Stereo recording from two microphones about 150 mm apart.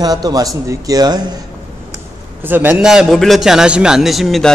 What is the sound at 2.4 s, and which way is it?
A man's voice, 10° right (ahead or behind).